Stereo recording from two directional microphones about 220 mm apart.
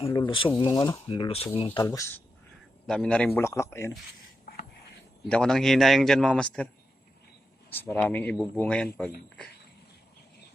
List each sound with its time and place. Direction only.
0.1 s a man's voice: 20° left (ahead or behind)
2.8 s a man's voice: 5° left (ahead or behind)
5.3 s a man's voice: 5° left (ahead or behind)
7.7 s a man's voice: 5° left (ahead or behind)